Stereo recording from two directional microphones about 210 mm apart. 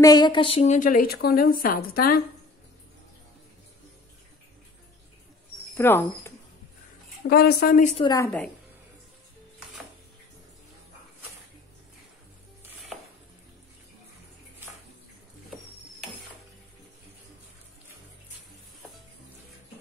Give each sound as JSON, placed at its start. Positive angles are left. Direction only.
{"t": 0.0, "sound": "a woman's voice", "side_deg": 20}
{"t": 5.8, "sound": "speech", "side_deg": 10}
{"t": 7.2, "sound": "a woman's voice", "side_deg": 45}
{"t": 8.0, "sound": "a woman's voice", "side_deg": 20}